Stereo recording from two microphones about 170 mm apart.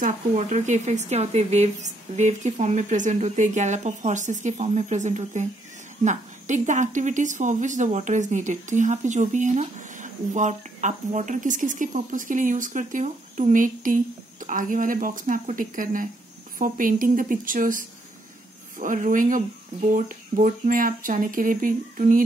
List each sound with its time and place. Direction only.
0.0 s speech: 45° right (ahead or behind)